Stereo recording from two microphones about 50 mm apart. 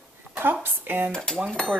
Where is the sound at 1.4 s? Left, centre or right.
Centre.